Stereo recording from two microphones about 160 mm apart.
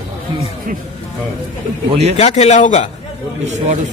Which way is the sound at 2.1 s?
45° left (ahead or behind).